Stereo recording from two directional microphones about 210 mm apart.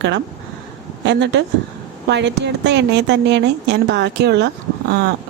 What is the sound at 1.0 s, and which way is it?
A woman's voice, 55° right (ahead or behind).